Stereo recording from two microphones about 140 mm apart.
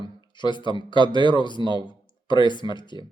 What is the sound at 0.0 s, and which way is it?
Speech, 35° left (ahead or behind).